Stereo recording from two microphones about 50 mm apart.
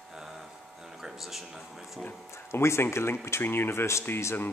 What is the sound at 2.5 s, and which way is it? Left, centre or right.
Speech, left.